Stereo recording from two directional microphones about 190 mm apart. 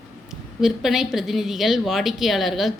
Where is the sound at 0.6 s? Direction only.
Centre (ahead or behind).